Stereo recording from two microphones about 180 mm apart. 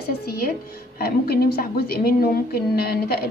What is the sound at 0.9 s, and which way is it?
A woman's voice, 60° left (ahead or behind).